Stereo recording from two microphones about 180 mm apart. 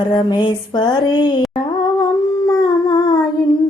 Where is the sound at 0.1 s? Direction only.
25° left (ahead or behind).